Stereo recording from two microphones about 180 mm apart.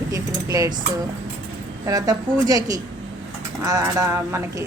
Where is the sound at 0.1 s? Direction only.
20° right (ahead or behind).